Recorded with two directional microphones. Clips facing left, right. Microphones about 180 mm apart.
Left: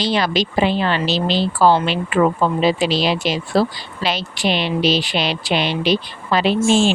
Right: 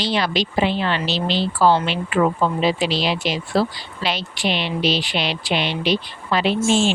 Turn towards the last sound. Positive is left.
turn(degrees=35)  # may be behind; listen again after turning